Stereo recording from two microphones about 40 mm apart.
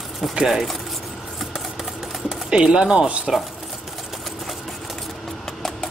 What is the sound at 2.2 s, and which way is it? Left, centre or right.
Speech, centre.